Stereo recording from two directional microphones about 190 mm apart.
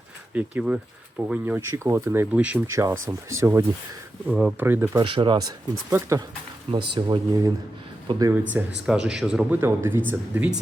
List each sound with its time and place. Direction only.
0.3 s speech: 10° right (ahead or behind)
5.0 s speech: 25° right (ahead or behind)
8.6 s speech: 10° right (ahead or behind)